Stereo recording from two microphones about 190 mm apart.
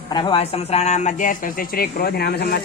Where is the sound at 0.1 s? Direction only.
25° left (ahead or behind).